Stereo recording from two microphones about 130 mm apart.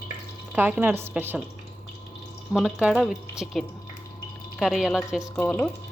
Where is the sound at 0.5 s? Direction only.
15° right (ahead or behind).